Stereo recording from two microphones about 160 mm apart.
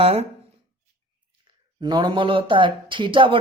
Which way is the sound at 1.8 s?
25° right (ahead or behind).